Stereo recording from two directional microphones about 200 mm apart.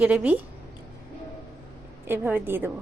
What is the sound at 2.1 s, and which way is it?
Speech, 10° right (ahead or behind).